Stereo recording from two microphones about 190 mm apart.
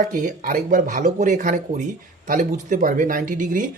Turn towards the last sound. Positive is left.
turn(degrees=-45)  # may be behind; listen again after turning